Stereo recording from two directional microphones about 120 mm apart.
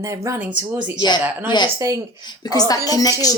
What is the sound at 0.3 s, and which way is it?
Speech, 10° right (ahead or behind).